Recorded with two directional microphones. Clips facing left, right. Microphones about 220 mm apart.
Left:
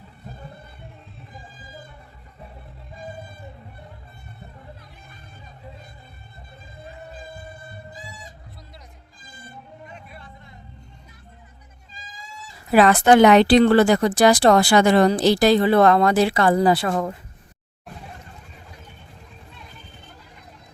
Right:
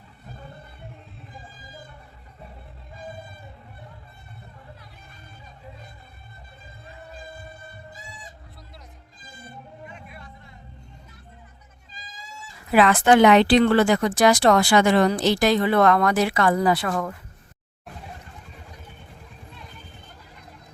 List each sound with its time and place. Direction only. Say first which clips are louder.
9.9 s music: left 1 dB; 35° left (ahead or behind)
12.7 s speech: left 2 dB; 40° left (ahead or behind)